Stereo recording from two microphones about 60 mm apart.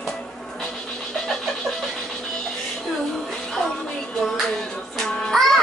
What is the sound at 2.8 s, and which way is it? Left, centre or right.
Music, centre.